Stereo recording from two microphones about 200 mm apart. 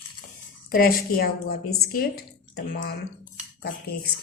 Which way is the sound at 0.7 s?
45° left (ahead or behind).